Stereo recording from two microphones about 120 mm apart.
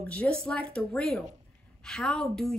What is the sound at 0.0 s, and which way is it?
Speech, 10° left (ahead or behind).